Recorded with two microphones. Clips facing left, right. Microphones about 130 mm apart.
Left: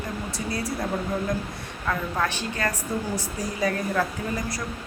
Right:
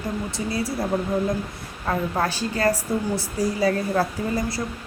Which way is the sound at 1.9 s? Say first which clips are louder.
Right 3 dB; 35° right (ahead or behind).